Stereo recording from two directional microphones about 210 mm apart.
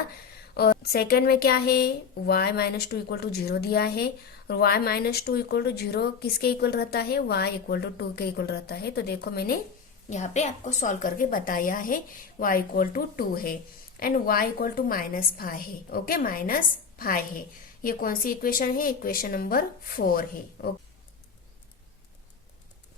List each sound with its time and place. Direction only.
0.5 s a woman's voice: 50° left (ahead or behind)
10.1 s a woman's voice: 35° left (ahead or behind)